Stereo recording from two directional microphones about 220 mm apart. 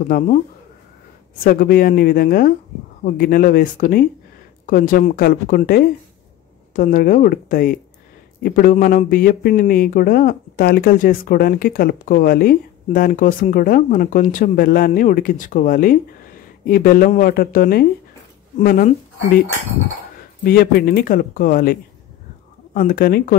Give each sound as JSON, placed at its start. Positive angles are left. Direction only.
{"t": 0.1, "sound": "speech", "side_deg": 40}
{"t": 1.4, "sound": "speech", "side_deg": 40}
{"t": 20.4, "sound": "speech", "side_deg": 45}
{"t": 22.8, "sound": "speech", "side_deg": 40}